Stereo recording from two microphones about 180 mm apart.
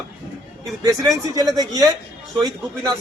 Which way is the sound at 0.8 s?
20° right (ahead or behind).